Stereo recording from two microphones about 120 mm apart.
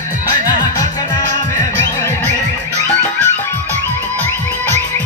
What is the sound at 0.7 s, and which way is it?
Music, 30° left (ahead or behind).